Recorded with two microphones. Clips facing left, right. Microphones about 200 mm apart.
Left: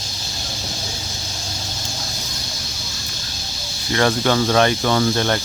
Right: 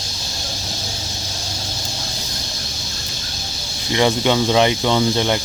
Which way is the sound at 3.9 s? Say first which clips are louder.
Right 1 dB; 15° right (ahead or behind).